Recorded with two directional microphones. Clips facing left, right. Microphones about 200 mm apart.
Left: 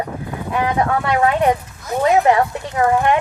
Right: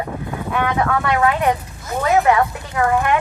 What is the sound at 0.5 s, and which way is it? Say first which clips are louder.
A woman's voice: left 1 dB; 30° left (ahead or behind).